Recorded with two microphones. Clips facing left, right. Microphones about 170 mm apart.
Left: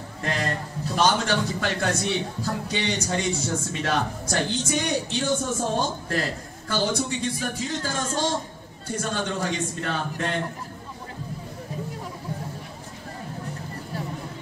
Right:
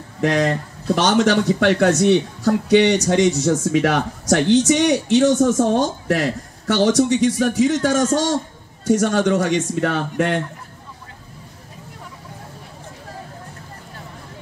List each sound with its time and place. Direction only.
0.2 s a man's voice: 75° right (ahead or behind)